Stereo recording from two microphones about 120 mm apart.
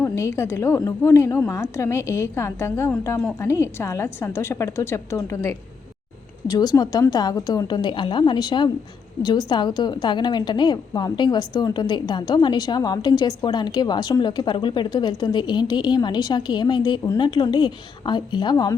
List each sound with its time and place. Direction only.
0.0 s a woman's voice: 20° left (ahead or behind)